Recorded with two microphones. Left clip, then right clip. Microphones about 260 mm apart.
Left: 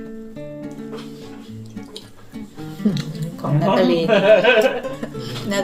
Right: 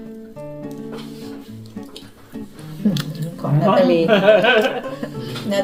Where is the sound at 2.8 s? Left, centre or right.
Centre.